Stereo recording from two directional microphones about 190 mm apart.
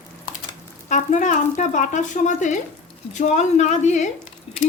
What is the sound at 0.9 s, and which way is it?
A woman's voice, 40° left (ahead or behind).